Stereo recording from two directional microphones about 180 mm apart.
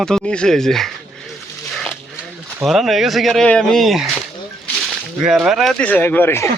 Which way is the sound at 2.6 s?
Centre (ahead or behind).